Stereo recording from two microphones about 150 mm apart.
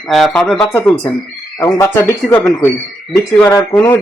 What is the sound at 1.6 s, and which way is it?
A man's voice, 20° left (ahead or behind).